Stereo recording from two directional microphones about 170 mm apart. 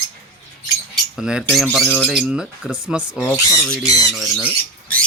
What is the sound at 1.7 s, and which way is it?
Speech, 5° right (ahead or behind).